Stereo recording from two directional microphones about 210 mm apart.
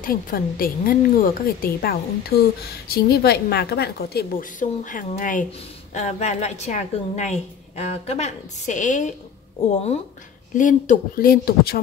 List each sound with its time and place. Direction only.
0.0 s a woman's voice: 40° left (ahead or behind)
10.5 s a woman's voice: 40° left (ahead or behind)